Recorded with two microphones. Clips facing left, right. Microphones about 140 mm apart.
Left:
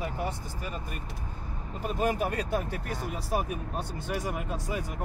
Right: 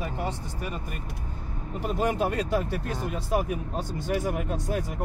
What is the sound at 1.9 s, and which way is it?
Speech, 75° right (ahead or behind).